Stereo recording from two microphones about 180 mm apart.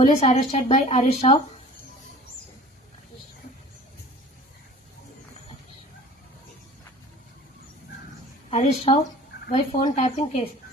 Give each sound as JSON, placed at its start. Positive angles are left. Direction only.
{"t": 0.0, "sound": "a woman's voice", "side_deg": 35}
{"t": 8.4, "sound": "a woman's voice", "side_deg": 35}